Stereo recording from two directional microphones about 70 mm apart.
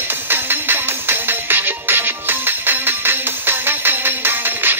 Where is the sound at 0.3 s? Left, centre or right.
Right.